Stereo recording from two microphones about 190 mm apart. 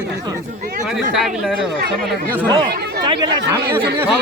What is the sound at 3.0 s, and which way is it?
Speech, 20° right (ahead or behind).